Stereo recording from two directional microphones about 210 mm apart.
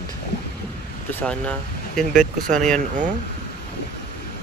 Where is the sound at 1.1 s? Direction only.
5° left (ahead or behind).